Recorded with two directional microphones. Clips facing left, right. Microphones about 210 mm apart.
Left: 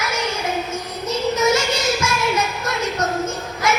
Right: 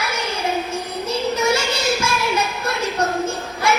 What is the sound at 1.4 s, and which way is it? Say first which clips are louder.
Child singing: left 3 dB; 30° right (ahead or behind).